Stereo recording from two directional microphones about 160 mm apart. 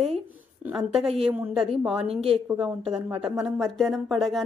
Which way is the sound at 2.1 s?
40° right (ahead or behind).